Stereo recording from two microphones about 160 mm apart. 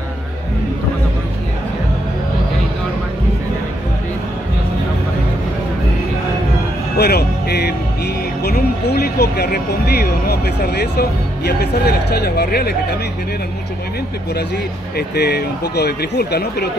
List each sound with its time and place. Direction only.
7.0 s speech: 85° left
15.0 s speech: 90° left